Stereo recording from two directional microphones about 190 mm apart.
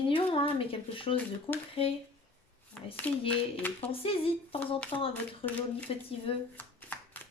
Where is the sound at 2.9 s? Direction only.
10° left (ahead or behind).